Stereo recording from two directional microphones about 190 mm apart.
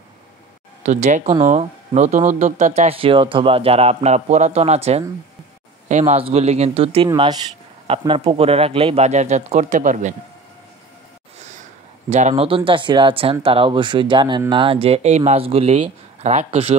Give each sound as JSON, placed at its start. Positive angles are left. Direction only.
{"t": 0.8, "sound": "speech", "side_deg": -40}
{"t": 12.1, "sound": "speech", "side_deg": -35}